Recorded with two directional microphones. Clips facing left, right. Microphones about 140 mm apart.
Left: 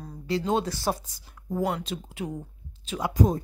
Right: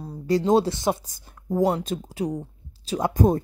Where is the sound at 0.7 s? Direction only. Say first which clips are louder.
Right 4 dB; 20° right (ahead or behind).